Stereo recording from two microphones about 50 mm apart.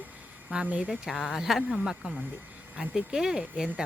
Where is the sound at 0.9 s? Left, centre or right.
Centre.